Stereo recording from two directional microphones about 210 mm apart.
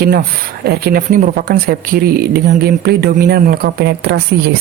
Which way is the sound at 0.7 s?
45° right (ahead or behind).